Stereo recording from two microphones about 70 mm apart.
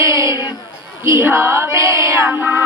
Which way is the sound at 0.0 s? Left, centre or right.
Right.